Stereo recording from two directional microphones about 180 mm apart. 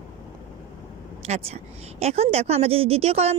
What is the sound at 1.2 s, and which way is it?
A woman's voice, 35° right (ahead or behind).